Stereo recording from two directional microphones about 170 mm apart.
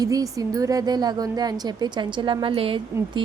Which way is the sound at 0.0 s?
20° right (ahead or behind).